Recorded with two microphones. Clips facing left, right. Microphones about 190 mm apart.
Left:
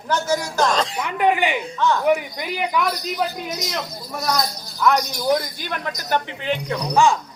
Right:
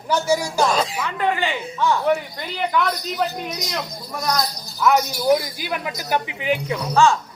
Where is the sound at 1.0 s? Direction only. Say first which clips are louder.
Left 3 dB; 15° left (ahead or behind); by 6.7 s 10° right (ahead or behind).